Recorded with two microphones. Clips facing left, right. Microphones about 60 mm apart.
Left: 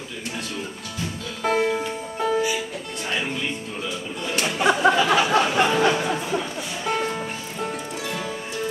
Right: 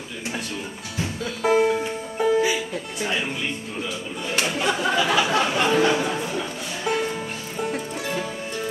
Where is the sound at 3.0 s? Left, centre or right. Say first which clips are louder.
Right 1 dB; centre.